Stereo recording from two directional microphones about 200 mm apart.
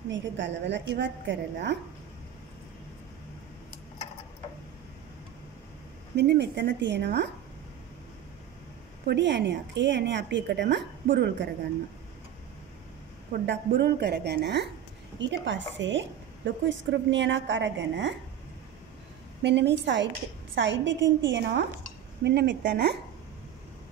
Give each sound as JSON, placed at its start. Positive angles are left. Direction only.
{"t": 0.1, "sound": "a woman's voice", "side_deg": -65}
{"t": 6.1, "sound": "a woman's voice", "side_deg": -60}
{"t": 9.0, "sound": "a woman's voice", "side_deg": -60}
{"t": 13.5, "sound": "a woman's voice", "side_deg": -55}
{"t": 19.4, "sound": "a woman's voice", "side_deg": -60}